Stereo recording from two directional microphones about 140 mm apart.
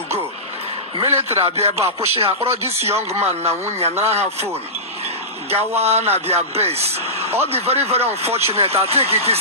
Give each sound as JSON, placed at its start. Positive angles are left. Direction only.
{"t": 1.0, "sound": "speech", "side_deg": -50}
{"t": 5.5, "sound": "speech", "side_deg": -45}